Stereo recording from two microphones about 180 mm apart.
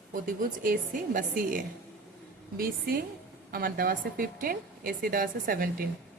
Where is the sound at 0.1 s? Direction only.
50° right (ahead or behind).